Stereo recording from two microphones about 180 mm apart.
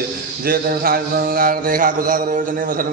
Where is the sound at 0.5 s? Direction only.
55° right (ahead or behind).